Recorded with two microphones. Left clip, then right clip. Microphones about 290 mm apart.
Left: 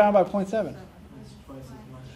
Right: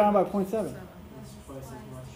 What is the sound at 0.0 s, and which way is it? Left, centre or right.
Speech, left.